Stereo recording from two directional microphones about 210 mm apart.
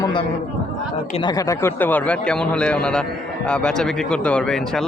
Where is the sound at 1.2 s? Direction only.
15° left (ahead or behind).